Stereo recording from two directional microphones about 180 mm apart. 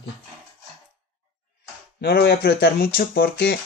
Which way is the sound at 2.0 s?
65° left (ahead or behind).